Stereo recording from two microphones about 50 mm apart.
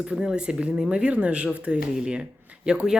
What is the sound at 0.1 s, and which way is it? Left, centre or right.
Speech, centre.